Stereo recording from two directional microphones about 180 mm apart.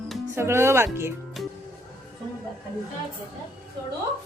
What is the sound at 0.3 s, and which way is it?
Speech, 15° right (ahead or behind).